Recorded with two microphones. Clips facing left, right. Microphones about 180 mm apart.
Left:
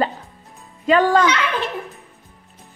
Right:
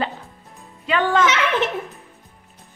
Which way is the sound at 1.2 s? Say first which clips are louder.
Even; 20° right (ahead or behind).